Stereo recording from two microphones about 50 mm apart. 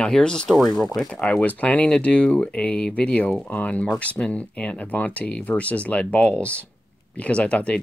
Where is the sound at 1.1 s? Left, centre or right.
Left.